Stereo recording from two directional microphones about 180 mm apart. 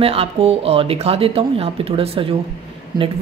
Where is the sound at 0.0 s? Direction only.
35° right (ahead or behind).